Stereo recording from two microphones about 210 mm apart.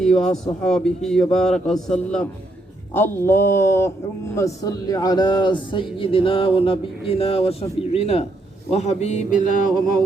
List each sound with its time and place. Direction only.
0.0 s a man's voice: 5° left (ahead or behind); by 8.3 s 30° left (ahead or behind)
8.7 s music: 30° left (ahead or behind)